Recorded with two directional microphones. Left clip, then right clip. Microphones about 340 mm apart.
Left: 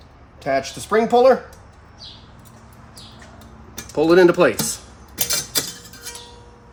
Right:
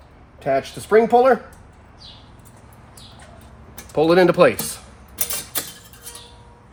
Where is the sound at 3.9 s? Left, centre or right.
Centre.